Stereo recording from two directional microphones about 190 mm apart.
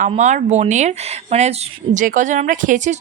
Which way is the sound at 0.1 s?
40° right (ahead or behind).